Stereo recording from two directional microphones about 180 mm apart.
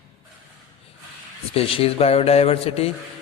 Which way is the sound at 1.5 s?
30° left (ahead or behind).